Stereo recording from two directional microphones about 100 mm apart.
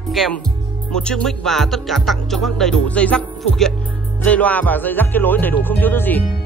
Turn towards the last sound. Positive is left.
turn(degrees=20)  # may be behind; listen again after turning